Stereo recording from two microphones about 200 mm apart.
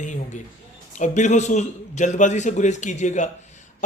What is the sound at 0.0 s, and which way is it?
Speech, 40° left (ahead or behind).